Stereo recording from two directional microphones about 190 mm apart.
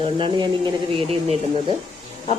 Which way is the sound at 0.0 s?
25° right (ahead or behind).